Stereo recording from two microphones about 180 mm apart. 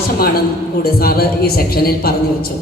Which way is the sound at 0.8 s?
60° left (ahead or behind).